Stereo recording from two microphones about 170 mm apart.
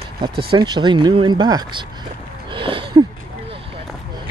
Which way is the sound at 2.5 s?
30° right (ahead or behind).